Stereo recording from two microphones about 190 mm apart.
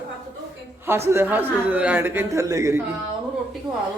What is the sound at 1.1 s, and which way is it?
A woman's voice, 10° right (ahead or behind).